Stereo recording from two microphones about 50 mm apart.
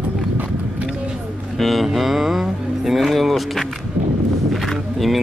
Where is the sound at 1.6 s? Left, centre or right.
Centre.